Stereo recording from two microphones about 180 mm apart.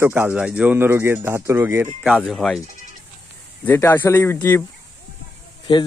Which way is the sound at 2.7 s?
45° right (ahead or behind).